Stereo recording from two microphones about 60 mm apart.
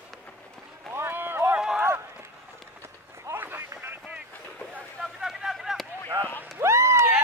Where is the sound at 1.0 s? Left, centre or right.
Right.